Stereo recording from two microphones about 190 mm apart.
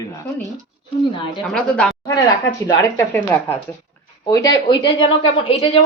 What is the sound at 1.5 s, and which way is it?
A woman's voice, 5° left (ahead or behind).